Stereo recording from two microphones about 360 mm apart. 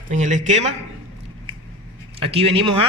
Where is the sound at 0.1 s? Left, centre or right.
Centre.